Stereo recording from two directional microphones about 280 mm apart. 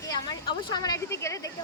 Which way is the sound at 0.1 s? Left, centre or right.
Centre.